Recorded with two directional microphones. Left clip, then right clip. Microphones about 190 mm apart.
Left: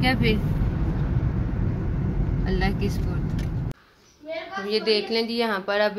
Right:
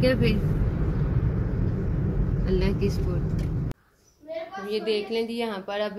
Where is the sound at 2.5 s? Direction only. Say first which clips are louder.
Even; 10° right (ahead or behind).